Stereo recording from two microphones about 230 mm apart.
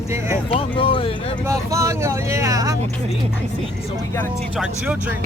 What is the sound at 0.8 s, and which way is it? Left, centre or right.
Speech, left.